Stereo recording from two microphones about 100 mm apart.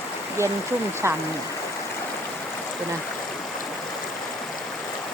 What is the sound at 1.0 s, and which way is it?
Speech, 30° right (ahead or behind).